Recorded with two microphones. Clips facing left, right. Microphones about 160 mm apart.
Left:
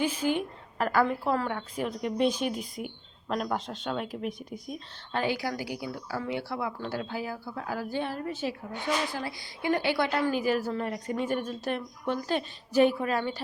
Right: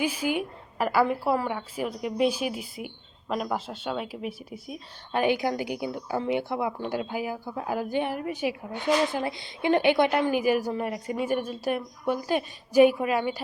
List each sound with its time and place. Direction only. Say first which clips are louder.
0.0 s a woman's voice: even; 10° right (ahead or behind)
5.2 s a woman's voice: right 6 dB; 20° right (ahead or behind)